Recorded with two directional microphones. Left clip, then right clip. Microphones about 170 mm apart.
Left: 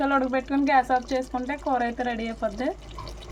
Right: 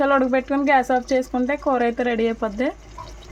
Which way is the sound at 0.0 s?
50° right (ahead or behind).